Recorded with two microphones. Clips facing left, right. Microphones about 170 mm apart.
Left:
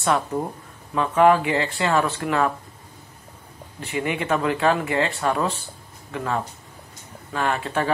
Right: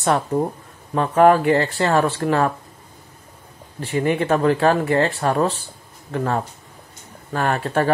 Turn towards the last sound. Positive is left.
turn(degrees=-45)  # may be behind; listen again after turning